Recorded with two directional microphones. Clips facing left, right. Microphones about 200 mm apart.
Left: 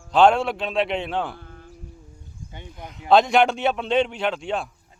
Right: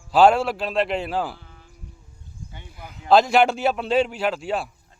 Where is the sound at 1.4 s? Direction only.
55° left (ahead or behind).